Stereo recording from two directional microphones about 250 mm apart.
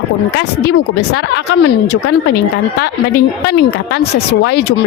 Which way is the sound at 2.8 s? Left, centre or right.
Left.